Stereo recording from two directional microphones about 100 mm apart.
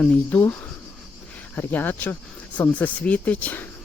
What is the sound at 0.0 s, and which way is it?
Speech, 15° left (ahead or behind).